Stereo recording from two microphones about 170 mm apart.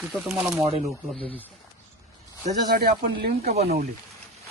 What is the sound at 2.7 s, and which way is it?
Speech, 75° right (ahead or behind).